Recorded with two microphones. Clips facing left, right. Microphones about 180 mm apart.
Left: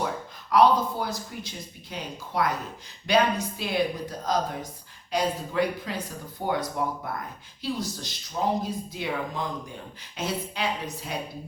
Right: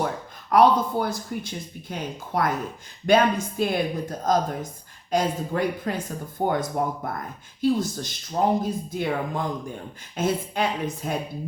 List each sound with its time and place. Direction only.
0.5 s speech: 55° right (ahead or behind)